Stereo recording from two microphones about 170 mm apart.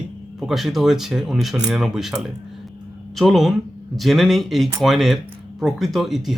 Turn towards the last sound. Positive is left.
turn(degrees=0)  # may be behind; listen again after turning